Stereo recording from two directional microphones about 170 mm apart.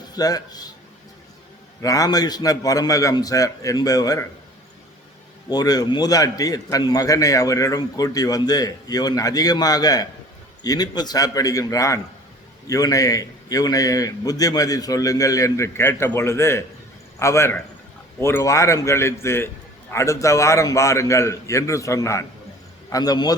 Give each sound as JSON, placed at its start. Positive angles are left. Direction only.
{"t": 0.1, "sound": "a man's voice", "side_deg": 20}
{"t": 1.8, "sound": "a man's voice", "side_deg": 20}
{"t": 5.5, "sound": "a man's voice", "side_deg": 25}